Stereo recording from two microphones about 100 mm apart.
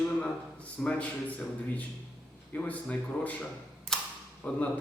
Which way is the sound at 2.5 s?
15° left (ahead or behind).